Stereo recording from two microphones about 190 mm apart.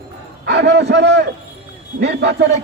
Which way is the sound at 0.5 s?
60° right (ahead or behind).